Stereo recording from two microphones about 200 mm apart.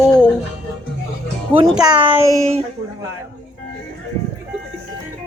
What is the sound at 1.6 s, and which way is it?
Speech, 5° right (ahead or behind).